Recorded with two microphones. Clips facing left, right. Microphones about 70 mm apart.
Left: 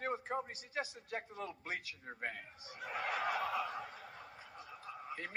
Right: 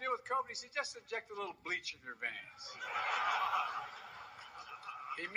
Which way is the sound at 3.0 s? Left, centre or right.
Left.